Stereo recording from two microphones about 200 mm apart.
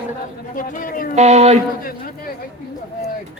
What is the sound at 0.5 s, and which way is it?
Speech, 40° left (ahead or behind).